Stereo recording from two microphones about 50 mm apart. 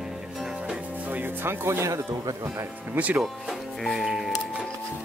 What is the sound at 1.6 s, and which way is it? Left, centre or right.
Speech, right.